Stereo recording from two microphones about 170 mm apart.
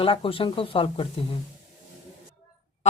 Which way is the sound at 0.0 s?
30° left (ahead or behind).